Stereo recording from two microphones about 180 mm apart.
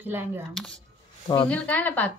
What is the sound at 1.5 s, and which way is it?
Speech, 10° left (ahead or behind).